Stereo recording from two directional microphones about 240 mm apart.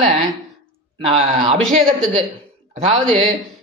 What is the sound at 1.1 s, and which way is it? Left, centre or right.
Speech, right.